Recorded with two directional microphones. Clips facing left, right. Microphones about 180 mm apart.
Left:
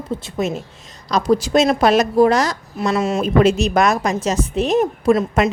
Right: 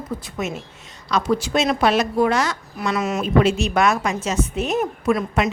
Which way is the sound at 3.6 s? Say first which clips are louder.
Left 3 dB; 40° left (ahead or behind).